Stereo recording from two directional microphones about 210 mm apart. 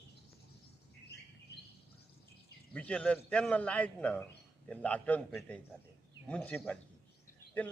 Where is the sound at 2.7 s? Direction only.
5° left (ahead or behind).